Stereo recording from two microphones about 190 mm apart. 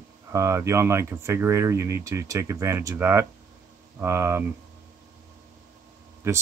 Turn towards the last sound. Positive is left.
turn(degrees=-15)  # may be behind; listen again after turning